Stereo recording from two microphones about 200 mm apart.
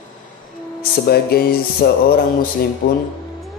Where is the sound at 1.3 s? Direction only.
50° left (ahead or behind).